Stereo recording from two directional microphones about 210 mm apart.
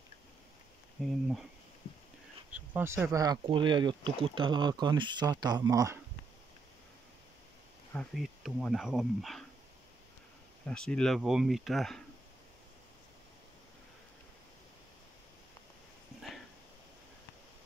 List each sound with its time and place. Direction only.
1.0 s speech: centre (ahead or behind)
2.5 s speech: 10° right (ahead or behind)
7.9 s speech: centre (ahead or behind)
10.7 s speech: 5° left (ahead or behind)